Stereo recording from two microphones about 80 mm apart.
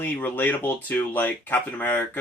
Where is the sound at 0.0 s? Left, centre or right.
Left.